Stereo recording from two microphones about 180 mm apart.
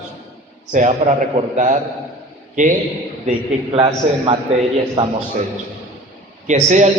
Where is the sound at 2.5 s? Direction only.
45° right (ahead or behind).